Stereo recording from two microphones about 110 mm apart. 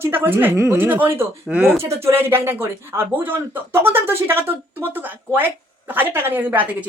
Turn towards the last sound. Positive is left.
turn(degrees=-20)  # may be behind; listen again after turning